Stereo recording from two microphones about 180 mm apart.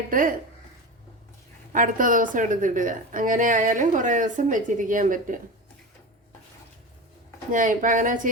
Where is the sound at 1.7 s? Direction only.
45° right (ahead or behind).